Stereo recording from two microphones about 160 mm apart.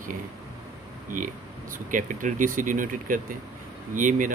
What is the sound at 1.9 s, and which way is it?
Speech, 55° right (ahead or behind).